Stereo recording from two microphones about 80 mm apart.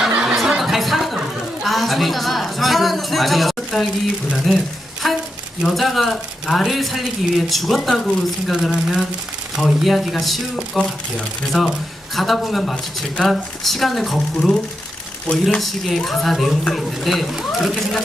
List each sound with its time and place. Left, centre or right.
0.2 s a sound: centre
1.6 s speech: centre
8.5 s speech: centre